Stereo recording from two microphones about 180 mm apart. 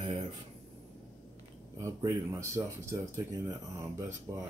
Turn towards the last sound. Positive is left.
turn(degrees=-15)  # may be behind; listen again after turning